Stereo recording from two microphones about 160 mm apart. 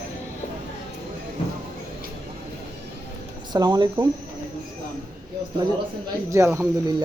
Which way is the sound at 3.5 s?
25° right (ahead or behind).